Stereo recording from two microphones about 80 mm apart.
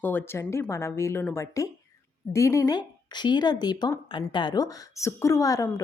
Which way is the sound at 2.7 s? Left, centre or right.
Left.